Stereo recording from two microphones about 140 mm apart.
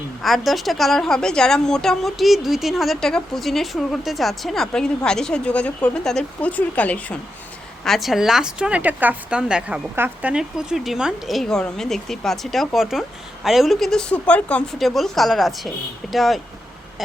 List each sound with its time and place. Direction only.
0.2 s speech: centre (ahead or behind)